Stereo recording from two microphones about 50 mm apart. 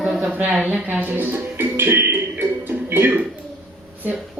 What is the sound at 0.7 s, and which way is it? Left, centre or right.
Speech, right.